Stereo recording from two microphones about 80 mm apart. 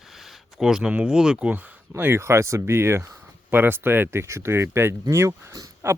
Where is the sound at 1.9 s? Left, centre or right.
Right.